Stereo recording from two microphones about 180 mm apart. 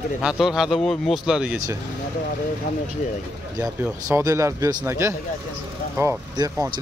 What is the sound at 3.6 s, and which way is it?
Speech, 15° right (ahead or behind).